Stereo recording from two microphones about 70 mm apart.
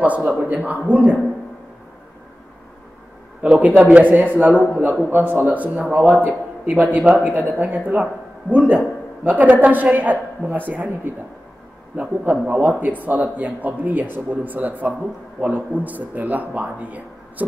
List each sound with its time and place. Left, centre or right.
0.0 s a man's voice: right
3.4 s a man's voice: centre